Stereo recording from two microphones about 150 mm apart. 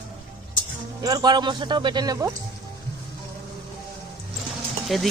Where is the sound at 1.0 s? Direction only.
25° right (ahead or behind).